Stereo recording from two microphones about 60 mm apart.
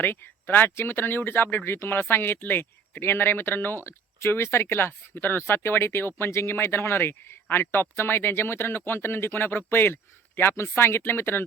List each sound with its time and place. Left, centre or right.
0.0 s speech: left